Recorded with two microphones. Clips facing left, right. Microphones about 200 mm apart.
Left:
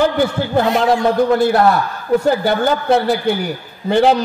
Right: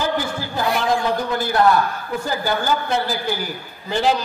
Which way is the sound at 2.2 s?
65° left (ahead or behind).